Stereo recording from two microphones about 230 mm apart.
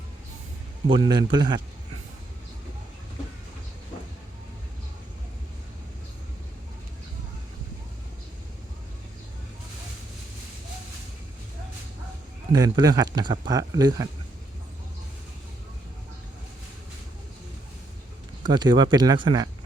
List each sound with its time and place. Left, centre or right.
0.9 s speech: centre
12.5 s speech: centre
18.4 s speech: centre